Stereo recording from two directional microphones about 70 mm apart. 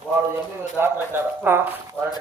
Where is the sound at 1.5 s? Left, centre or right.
Right.